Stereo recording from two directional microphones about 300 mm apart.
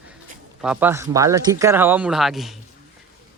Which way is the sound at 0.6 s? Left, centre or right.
Centre.